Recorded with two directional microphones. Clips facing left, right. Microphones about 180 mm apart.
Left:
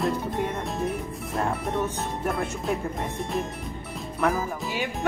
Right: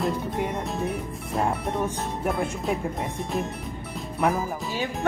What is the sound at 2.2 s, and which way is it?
Speech, centre (ahead or behind).